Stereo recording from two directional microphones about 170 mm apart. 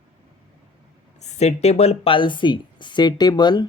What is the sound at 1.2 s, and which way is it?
Speech, 40° left (ahead or behind).